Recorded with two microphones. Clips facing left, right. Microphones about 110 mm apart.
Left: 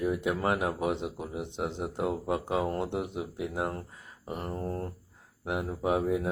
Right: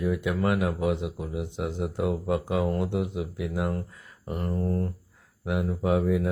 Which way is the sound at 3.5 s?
35° left (ahead or behind).